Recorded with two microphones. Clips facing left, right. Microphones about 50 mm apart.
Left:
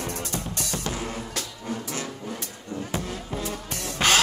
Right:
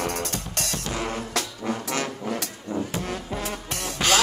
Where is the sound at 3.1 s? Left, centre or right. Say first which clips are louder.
Right 2 dB; right.